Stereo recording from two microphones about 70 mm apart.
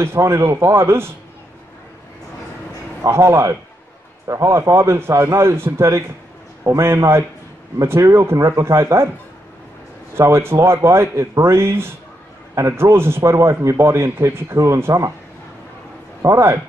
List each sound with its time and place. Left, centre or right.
0.0 s a man's voice: right
3.0 s a man's voice: right
10.1 s a man's voice: right
16.2 s speech: right